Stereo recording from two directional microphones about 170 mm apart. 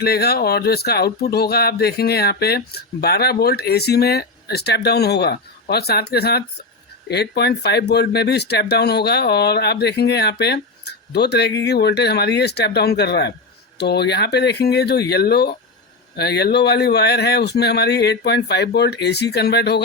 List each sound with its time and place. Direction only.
0.0 s speech: 65° left (ahead or behind)